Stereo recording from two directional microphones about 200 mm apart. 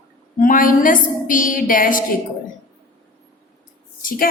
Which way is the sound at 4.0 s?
45° left (ahead or behind).